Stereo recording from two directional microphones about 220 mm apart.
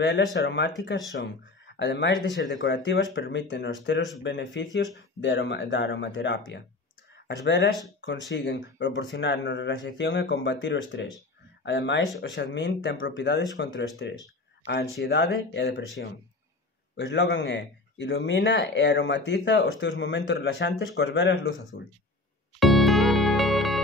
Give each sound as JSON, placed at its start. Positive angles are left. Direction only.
{"t": 0.0, "sound": "speech", "side_deg": 50}
{"t": 16.9, "sound": "speech", "side_deg": 55}
{"t": 22.6, "sound": "music", "side_deg": 0}